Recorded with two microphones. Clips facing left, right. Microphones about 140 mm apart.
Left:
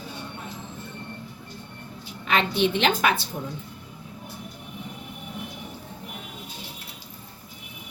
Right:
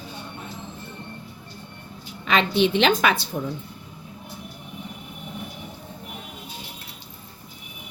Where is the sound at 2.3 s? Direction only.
90° right.